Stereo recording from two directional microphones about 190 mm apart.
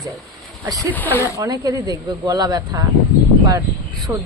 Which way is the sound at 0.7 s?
10° left (ahead or behind).